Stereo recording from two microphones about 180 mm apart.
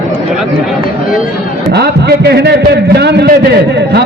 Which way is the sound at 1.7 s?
65° right (ahead or behind).